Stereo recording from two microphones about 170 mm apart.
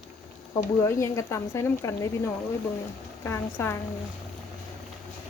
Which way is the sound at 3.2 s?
15° left (ahead or behind).